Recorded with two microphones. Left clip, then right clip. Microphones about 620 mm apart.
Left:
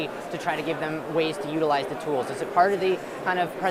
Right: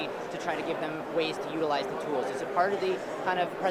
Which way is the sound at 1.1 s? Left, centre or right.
Left.